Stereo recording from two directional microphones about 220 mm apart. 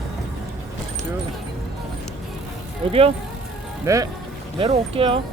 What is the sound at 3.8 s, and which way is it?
Speech, 15° right (ahead or behind).